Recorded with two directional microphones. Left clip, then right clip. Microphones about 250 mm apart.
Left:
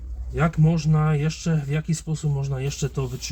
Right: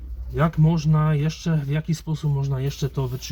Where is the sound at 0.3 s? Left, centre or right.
Right.